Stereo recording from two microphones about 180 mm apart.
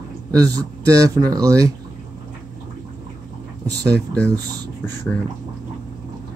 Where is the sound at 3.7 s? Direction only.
65° right (ahead or behind).